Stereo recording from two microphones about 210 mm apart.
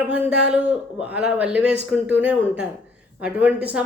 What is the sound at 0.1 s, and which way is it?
Speech, 5° right (ahead or behind).